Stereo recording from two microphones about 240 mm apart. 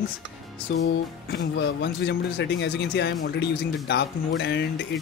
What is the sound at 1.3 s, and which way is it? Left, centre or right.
Speech, left.